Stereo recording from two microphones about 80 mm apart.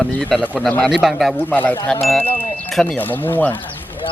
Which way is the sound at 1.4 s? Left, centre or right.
Left.